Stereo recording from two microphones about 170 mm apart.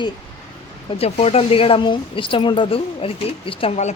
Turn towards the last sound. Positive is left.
turn(degrees=35)  # may be behind; listen again after turning